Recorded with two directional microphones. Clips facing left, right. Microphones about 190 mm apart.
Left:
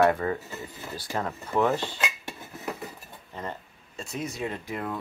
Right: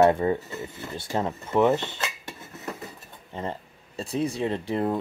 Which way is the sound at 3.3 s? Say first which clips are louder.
Right 4 dB; 30° right (ahead or behind).